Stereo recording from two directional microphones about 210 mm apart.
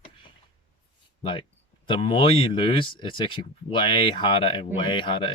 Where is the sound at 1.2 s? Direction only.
25° left (ahead or behind).